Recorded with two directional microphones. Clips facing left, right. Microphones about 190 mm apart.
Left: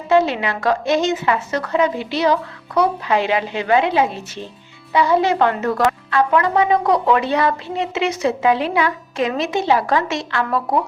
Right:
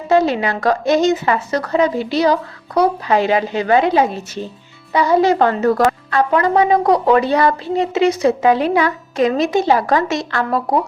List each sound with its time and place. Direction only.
0.1 s a woman's voice: 40° right (ahead or behind)